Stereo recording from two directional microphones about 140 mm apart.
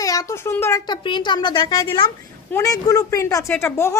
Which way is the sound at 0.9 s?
35° left (ahead or behind).